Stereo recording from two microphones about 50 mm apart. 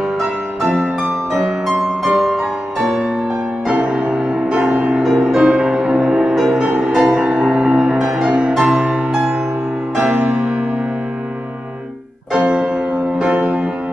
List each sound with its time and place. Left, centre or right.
0.7 s music: centre
3.6 s music: right
5.0 s music: centre
6.3 s music: centre
7.1 s music: right
12.4 s music: right